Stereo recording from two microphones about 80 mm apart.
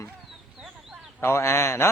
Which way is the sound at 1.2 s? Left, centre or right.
Left.